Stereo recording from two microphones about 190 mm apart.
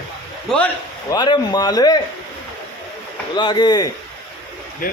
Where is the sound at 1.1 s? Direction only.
20° left (ahead or behind).